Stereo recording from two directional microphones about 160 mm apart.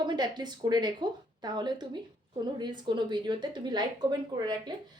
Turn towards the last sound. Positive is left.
turn(degrees=-25)  # may be behind; listen again after turning